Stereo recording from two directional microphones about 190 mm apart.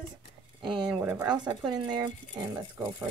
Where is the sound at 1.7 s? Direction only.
20° right (ahead or behind).